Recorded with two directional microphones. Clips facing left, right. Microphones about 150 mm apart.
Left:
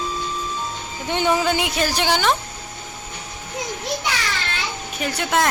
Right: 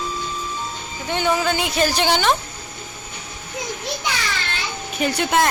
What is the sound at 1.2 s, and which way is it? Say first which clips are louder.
Speech: left 1 dB; 10° left (ahead or behind).